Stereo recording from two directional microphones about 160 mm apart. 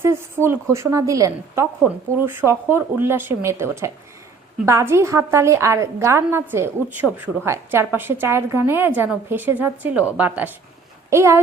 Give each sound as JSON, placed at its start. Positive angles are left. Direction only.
{"t": 0.0, "sound": "a woman's voice", "side_deg": -15}